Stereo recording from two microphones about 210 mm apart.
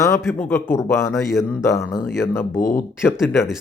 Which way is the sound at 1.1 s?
Centre (ahead or behind).